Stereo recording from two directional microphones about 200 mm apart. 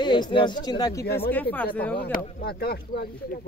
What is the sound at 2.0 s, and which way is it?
Speech, 50° left (ahead or behind).